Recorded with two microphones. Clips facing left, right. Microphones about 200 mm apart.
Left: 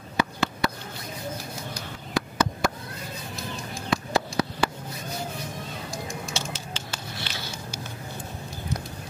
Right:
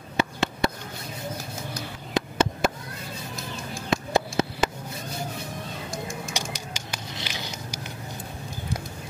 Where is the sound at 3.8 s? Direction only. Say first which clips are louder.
Right 2 dB; 20° right (ahead or behind).